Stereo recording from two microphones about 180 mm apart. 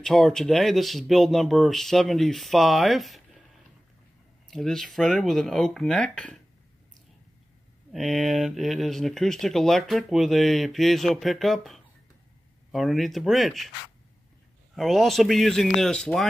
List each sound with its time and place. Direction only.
0.0 s speech: 5° left (ahead or behind)
4.5 s speech: centre (ahead or behind)
7.9 s speech: centre (ahead or behind)
14.8 s speech: centre (ahead or behind)